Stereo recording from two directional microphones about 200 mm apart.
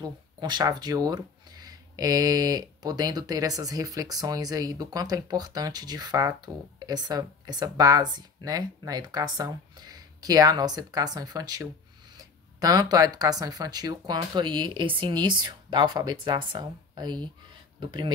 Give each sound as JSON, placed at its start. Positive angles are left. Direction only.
{"t": 0.0, "sound": "speech", "side_deg": -20}